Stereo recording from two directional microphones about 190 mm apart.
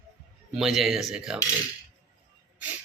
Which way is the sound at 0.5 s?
Centre (ahead or behind).